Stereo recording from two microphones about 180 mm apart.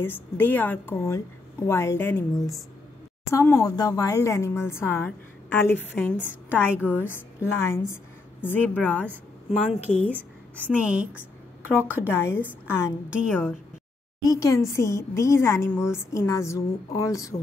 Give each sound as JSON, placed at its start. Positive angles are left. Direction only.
{"t": 0.0, "sound": "a woman's voice", "side_deg": 10}
{"t": 10.7, "sound": "a woman's voice", "side_deg": -5}
{"t": 12.1, "sound": "a woman's voice", "side_deg": 15}
{"t": 13.1, "sound": "a woman's voice", "side_deg": -5}
{"t": 14.2, "sound": "a woman's voice", "side_deg": 20}